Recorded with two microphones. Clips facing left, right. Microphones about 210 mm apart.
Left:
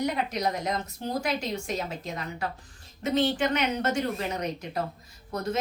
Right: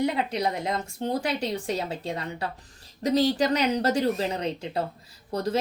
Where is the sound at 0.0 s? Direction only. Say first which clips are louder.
Right 2 dB; 30° right (ahead or behind).